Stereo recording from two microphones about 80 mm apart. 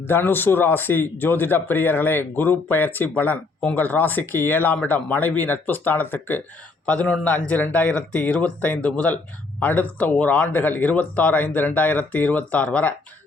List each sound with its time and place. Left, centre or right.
0.0 s speech: left